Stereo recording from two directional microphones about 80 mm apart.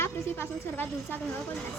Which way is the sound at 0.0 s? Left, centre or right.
Left.